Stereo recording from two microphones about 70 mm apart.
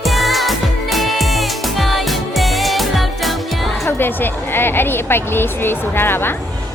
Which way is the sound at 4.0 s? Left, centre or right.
Left.